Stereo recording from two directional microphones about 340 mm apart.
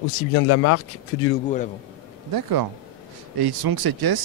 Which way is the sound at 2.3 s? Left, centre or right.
Right.